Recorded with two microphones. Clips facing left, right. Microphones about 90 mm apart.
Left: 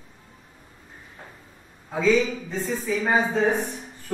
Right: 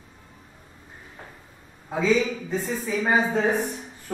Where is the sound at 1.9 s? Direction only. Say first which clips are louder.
Left 1 dB; 5° right (ahead or behind).